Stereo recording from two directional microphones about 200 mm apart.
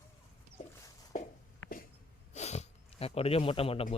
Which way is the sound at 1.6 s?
90° left.